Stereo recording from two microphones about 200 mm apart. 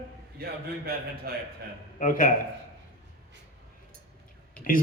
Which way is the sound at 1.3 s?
50° right (ahead or behind).